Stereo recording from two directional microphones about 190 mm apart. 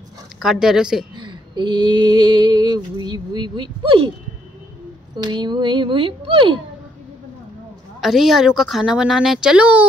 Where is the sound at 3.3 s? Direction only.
25° right (ahead or behind).